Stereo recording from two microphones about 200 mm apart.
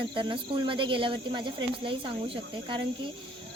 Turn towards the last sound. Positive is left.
turn(degrees=-25)  # may be behind; listen again after turning